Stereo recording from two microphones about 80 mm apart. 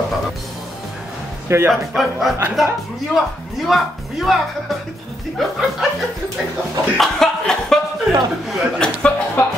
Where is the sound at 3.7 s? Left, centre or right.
Centre.